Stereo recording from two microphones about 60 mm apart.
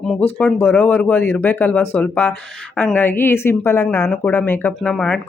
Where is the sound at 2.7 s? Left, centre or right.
Left.